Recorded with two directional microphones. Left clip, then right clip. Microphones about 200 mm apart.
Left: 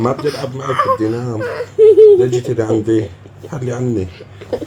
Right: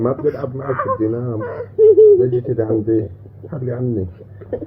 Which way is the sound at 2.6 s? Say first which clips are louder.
Left 3 dB; 30° left (ahead or behind).